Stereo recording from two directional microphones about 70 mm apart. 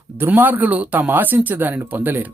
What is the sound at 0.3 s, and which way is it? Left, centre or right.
Speech, right.